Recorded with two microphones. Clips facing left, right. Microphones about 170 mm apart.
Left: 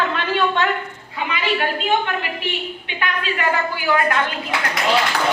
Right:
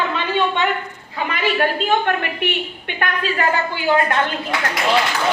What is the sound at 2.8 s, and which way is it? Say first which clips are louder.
Speech: right 3 dB; 45° right (ahead or behind).